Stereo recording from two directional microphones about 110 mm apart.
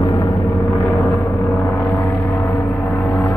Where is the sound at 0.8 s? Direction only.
30° left (ahead or behind).